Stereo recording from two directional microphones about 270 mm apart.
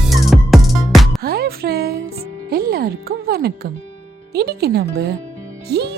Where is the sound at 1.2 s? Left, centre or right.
Right.